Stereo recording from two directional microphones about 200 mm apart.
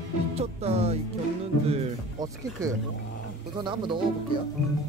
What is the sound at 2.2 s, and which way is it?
Speech, 20° right (ahead or behind).